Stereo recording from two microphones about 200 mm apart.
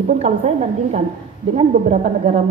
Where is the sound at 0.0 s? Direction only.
35° right (ahead or behind).